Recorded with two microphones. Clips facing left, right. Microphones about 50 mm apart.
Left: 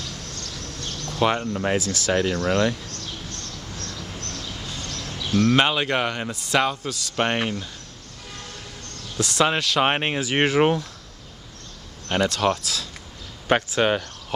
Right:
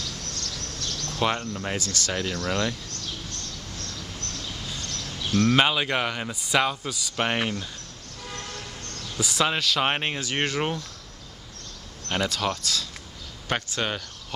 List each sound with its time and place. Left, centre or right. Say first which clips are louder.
0.2 s a sound: even; centre
1.1 s speech: left 5 dB; centre
3.7 s a sound: left 4 dB; centre
4.7 s speech: left 2 dB; centre
9.1 s speech: left 4 dB; centre
9.8 s speech: left 4 dB; centre
12.1 s speech: left 5 dB; centre